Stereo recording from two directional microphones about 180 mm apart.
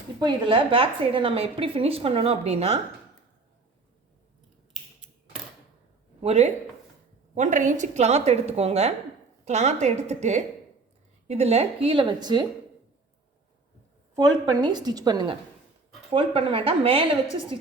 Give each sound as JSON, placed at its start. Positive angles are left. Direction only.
{"t": 0.2, "sound": "a woman's voice", "side_deg": -25}
{"t": 6.2, "sound": "a woman's voice", "side_deg": -35}
{"t": 14.5, "sound": "a woman's voice", "side_deg": -25}